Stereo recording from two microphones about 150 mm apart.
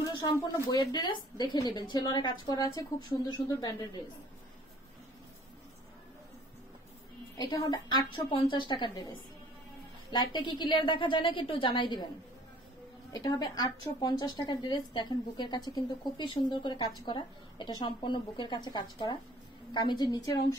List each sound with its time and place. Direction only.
0.0 s a woman's voice: 25° left (ahead or behind)
7.3 s a woman's voice: 25° left (ahead or behind)
10.1 s a woman's voice: 30° left (ahead or behind)
13.1 s a woman's voice: 25° left (ahead or behind)